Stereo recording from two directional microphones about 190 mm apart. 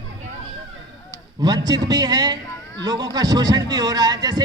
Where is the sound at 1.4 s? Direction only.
20° right (ahead or behind).